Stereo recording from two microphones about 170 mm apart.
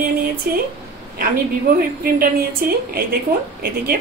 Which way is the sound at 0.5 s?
55° right (ahead or behind).